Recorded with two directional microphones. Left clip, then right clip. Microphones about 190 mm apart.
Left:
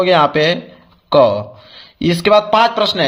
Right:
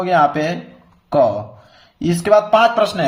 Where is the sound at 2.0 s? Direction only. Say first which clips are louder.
Left 2 dB; 50° left (ahead or behind).